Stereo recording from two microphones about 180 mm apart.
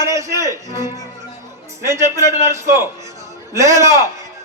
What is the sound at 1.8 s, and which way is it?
A man's voice, 15° right (ahead or behind).